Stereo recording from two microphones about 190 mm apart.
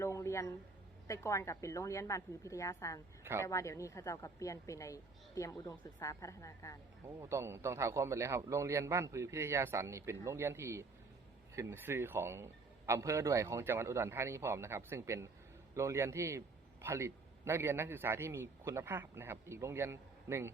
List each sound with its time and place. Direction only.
0.0 s a sound: 15° left (ahead or behind)
1.0 s speech: 15° left (ahead or behind)
7.2 s a man's voice: 15° right (ahead or behind)